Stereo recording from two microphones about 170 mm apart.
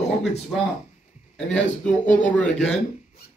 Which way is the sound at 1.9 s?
50° left (ahead or behind).